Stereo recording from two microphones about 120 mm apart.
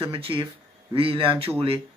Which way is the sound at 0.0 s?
50° right (ahead or behind).